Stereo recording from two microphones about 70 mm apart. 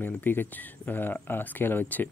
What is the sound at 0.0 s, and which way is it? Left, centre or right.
Speech, left.